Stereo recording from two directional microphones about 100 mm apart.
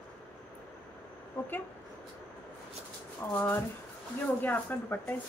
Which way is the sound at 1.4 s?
20° left (ahead or behind).